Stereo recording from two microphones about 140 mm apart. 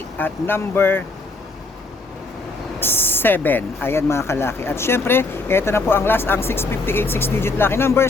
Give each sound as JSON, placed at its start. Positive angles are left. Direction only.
{"t": 0.2, "sound": "speech", "side_deg": 15}
{"t": 2.8, "sound": "speech", "side_deg": 15}